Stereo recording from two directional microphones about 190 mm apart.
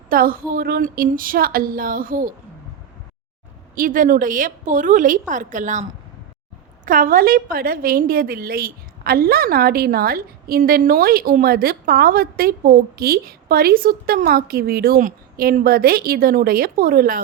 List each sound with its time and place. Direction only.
0.1 s a woman's voice: 50° right (ahead or behind)
3.8 s a woman's voice: 45° right (ahead or behind)
6.8 s a woman's voice: 50° right (ahead or behind)